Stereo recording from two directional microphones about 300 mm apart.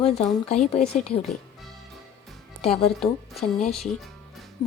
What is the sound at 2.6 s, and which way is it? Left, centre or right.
Speech, centre.